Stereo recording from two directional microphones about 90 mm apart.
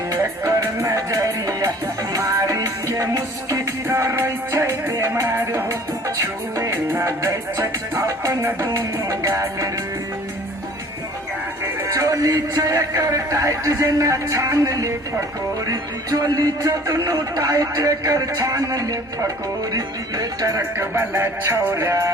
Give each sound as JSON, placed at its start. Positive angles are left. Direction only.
{"t": 0.1, "sound": "music", "side_deg": -35}
{"t": 11.9, "sound": "music", "side_deg": -35}
{"t": 20.7, "sound": "music", "side_deg": -25}